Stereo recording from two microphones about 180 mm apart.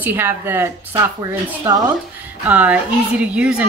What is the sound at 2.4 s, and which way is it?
Speech, 10° right (ahead or behind).